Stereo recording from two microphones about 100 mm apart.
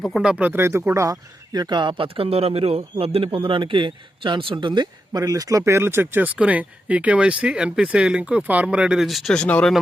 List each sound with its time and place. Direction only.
0.0 s speech: 5° right (ahead or behind)